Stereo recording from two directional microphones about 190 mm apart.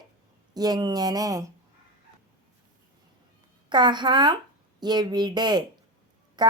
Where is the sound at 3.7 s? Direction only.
25° right (ahead or behind).